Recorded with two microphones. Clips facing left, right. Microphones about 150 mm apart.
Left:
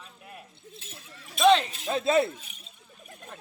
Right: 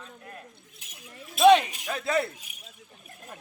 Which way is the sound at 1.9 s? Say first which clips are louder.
Left 4 dB; 25° left (ahead or behind).